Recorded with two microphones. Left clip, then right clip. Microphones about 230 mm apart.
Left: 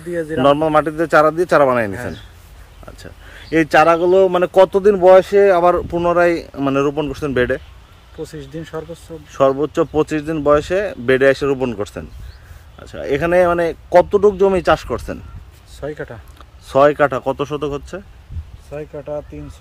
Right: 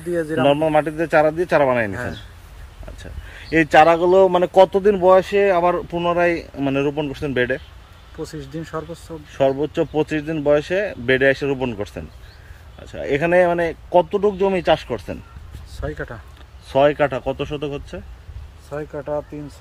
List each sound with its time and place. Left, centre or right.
0.3 s speech: centre
13.8 s speech: left
18.7 s speech: centre